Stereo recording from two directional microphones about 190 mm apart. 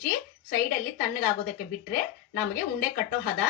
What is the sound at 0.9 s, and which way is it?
Speech, 50° left (ahead or behind).